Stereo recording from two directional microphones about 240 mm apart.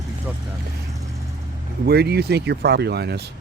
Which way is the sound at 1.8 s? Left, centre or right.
Right.